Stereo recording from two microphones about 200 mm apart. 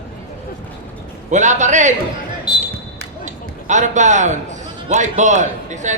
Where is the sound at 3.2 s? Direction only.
35° right (ahead or behind).